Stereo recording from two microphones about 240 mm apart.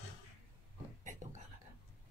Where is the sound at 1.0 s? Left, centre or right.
Right.